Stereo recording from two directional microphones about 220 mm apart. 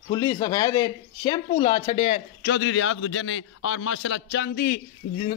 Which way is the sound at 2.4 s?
55° left (ahead or behind).